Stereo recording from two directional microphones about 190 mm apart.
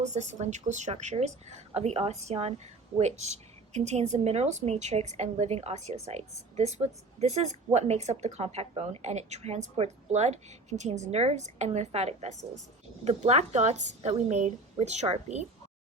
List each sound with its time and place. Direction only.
0.0 s speech: 40° right (ahead or behind)